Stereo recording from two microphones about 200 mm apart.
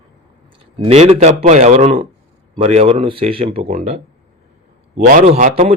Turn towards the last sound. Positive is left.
turn(degrees=-35)  # may be behind; listen again after turning